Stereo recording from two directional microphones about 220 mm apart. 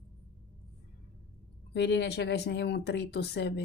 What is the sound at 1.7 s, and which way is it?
Speech, 50° left (ahead or behind).